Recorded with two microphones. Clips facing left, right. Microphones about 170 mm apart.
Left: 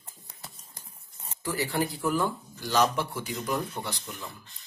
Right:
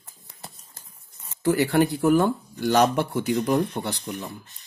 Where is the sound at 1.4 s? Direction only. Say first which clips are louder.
Right 9 dB; 65° right (ahead or behind).